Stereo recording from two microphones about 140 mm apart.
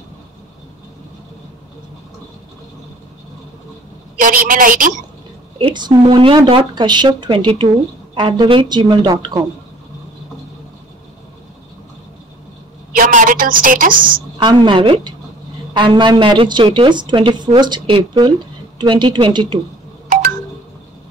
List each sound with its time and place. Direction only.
4.2 s a woman's voice: 85° right
5.6 s speech: 35° right (ahead or behind)
12.9 s a sound: 75° right (ahead or behind)
14.0 s a woman's voice: 35° right (ahead or behind)